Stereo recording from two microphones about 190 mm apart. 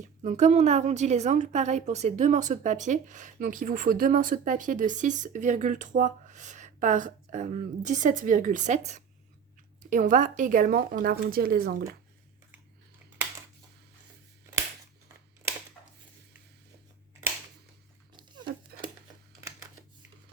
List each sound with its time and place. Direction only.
0.2 s a woman's voice: 40° right (ahead or behind)
9.9 s speech: 45° right (ahead or behind)
15.4 s scissors: 15° right (ahead or behind)